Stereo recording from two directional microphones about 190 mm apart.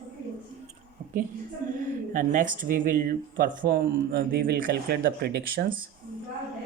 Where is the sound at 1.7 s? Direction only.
45° right (ahead or behind).